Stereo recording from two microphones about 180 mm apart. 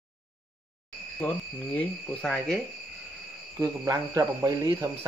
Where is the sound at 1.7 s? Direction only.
5° left (ahead or behind).